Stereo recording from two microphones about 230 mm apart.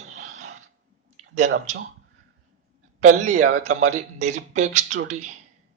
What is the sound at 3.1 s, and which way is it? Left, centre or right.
Speech, right.